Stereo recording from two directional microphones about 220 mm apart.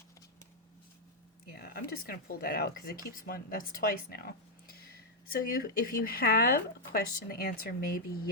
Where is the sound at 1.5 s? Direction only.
40° left (ahead or behind).